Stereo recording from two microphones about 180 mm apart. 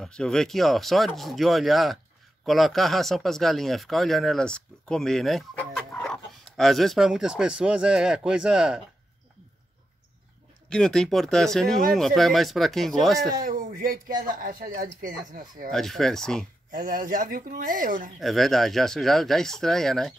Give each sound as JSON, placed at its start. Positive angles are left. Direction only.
{"t": 0.0, "sound": "speech", "side_deg": 5}
{"t": 10.7, "sound": "speech", "side_deg": 5}
{"t": 13.4, "sound": "speech", "side_deg": -55}
{"t": 15.7, "sound": "speech", "side_deg": 0}
{"t": 16.7, "sound": "speech", "side_deg": -55}
{"t": 18.2, "sound": "speech", "side_deg": 0}